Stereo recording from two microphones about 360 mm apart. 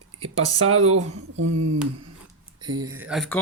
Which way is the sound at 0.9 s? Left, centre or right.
Right.